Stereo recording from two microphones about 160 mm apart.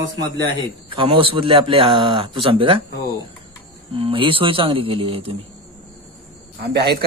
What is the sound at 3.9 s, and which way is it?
A man's voice, 35° right (ahead or behind).